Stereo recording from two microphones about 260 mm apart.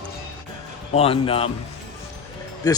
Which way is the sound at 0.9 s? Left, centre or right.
Left.